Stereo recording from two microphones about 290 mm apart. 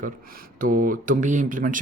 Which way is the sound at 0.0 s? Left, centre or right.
Right.